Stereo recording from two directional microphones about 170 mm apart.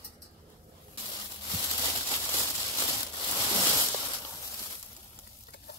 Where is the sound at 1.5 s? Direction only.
20° left (ahead or behind).